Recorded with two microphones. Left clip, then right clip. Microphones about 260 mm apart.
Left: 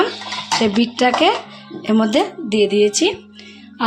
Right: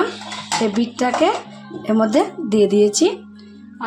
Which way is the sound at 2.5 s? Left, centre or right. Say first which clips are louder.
Even; centre.